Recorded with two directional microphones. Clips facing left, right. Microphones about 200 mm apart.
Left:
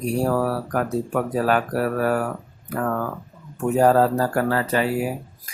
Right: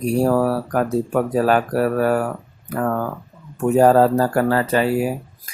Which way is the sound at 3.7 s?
35° right (ahead or behind).